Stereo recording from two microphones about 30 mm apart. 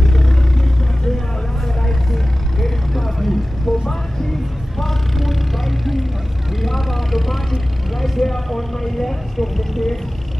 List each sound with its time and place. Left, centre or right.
2.6 s vehicle: centre
4.7 s vehicle: centre